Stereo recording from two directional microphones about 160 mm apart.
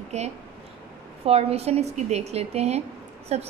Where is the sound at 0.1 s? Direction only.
45° right (ahead or behind).